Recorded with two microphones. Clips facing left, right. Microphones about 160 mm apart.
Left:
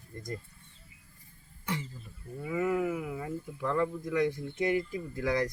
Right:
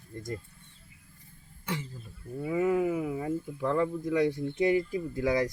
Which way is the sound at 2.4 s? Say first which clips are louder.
Right 3 dB; 20° right (ahead or behind).